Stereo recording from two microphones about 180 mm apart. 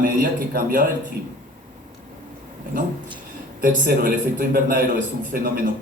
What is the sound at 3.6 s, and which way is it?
A man's voice, 55° right (ahead or behind).